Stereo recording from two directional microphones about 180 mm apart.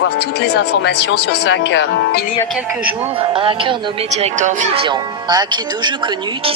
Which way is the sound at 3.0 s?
30° right (ahead or behind).